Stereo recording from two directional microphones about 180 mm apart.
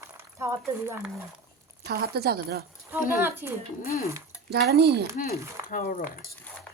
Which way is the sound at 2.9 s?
10° right (ahead or behind).